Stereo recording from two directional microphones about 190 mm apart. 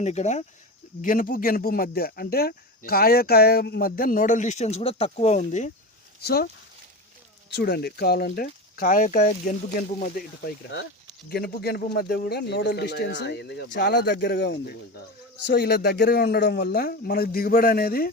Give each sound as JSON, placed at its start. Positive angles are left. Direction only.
{"t": 0.0, "sound": "speech", "side_deg": 35}
{"t": 6.2, "sound": "speech", "side_deg": 55}
{"t": 7.5, "sound": "speech", "side_deg": 55}